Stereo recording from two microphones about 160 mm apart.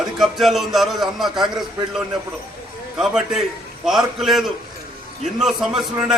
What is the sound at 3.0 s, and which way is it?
A man's voice, 5° right (ahead or behind).